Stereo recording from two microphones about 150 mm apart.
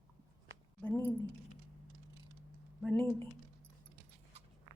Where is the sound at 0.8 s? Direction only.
10° left (ahead or behind).